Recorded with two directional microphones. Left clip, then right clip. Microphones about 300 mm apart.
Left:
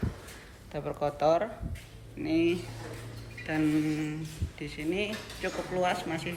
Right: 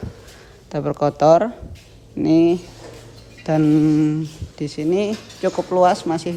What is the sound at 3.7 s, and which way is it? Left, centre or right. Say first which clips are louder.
Speech: right 14 dB; centre.